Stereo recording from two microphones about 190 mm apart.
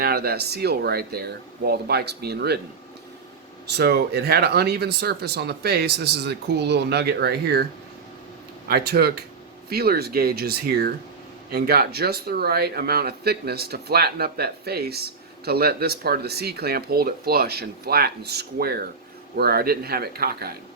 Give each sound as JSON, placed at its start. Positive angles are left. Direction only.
{"t": 0.0, "sound": "speech", "side_deg": -55}
{"t": 3.7, "sound": "speech", "side_deg": -60}